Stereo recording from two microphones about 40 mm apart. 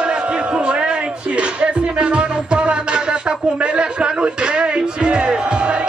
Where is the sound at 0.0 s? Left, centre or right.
Right.